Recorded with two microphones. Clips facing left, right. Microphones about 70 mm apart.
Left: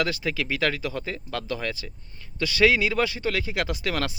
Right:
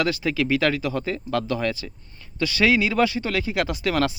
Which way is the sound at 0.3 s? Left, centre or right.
Right.